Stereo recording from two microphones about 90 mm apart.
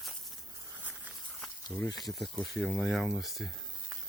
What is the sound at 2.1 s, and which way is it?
Speech, centre (ahead or behind).